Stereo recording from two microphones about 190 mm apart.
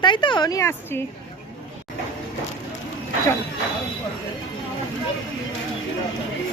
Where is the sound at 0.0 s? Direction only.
25° left (ahead or behind).